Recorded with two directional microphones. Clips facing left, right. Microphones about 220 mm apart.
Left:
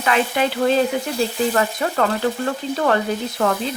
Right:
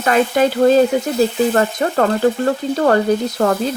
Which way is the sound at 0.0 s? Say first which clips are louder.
Right 5 dB; 40° right (ahead or behind).